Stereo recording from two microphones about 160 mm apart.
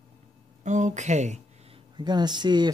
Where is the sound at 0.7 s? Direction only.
50° right (ahead or behind).